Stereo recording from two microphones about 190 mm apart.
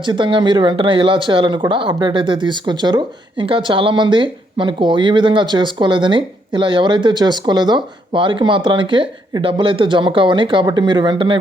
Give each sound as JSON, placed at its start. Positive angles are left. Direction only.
{"t": 0.0, "sound": "speech", "side_deg": -25}